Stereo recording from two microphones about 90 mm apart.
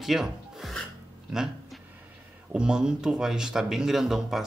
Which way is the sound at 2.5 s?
10° right (ahead or behind).